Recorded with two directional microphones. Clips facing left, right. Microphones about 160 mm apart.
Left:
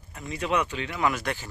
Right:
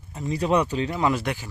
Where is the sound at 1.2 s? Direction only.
10° right (ahead or behind).